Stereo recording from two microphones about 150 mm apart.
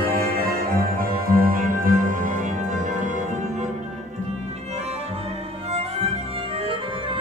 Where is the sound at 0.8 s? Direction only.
70° right (ahead or behind); by 3.1 s 55° right (ahead or behind).